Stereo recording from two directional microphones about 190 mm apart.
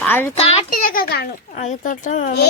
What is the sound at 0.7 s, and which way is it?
A child's voice, 50° left (ahead or behind).